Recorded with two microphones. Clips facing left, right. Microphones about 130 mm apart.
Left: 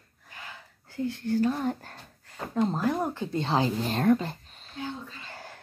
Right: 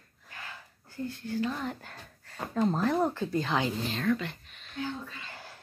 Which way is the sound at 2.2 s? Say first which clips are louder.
Left 1 dB; 20° left (ahead or behind).